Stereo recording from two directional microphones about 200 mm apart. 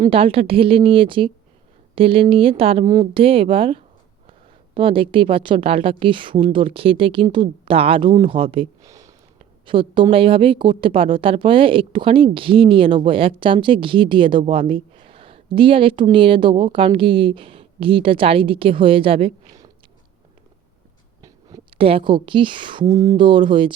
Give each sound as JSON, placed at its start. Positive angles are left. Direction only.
{"t": 0.0, "sound": "speech", "side_deg": -25}
{"t": 8.9, "sound": "a sound", "side_deg": -15}
{"t": 9.6, "sound": "speech", "side_deg": -25}
{"t": 21.2, "sound": "a woman's voice", "side_deg": -20}